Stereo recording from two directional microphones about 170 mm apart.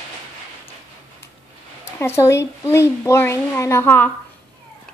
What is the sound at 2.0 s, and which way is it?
A woman's voice, 15° left (ahead or behind).